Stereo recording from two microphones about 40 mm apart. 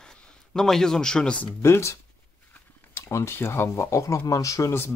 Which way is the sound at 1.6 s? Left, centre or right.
Left.